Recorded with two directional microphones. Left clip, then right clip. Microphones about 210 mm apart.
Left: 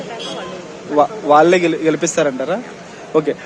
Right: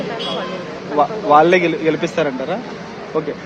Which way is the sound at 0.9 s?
45° left (ahead or behind).